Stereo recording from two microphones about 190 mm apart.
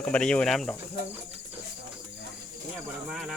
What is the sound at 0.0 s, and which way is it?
Speech, 5° left (ahead or behind).